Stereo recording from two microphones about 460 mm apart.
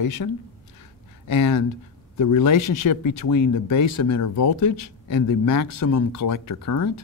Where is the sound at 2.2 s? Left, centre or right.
Left.